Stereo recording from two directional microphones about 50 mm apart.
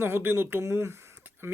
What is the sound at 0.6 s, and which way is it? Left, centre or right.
Speech, right.